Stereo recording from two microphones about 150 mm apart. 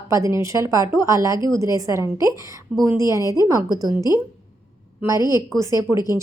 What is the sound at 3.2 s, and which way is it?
Speech, 25° left (ahead or behind).